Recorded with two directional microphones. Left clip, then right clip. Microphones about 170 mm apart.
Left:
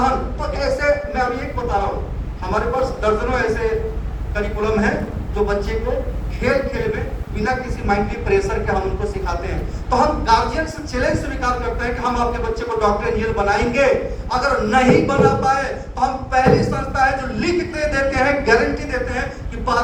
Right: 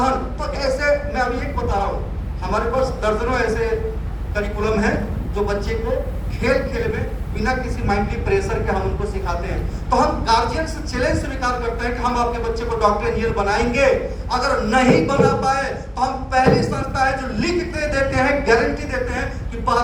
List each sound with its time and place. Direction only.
0.0 s a sound: 30° right (ahead or behind)
2.5 s a woman's voice: 30° right (ahead or behind)
9.9 s a woman's voice: 30° right (ahead or behind)